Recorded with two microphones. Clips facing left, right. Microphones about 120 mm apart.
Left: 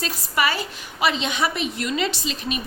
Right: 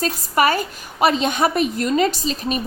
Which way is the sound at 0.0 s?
45° right (ahead or behind).